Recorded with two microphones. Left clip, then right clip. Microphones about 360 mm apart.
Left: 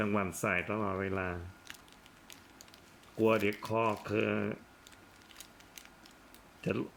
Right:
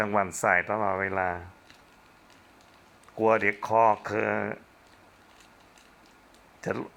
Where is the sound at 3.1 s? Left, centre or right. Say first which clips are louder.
Right 6 dB; right.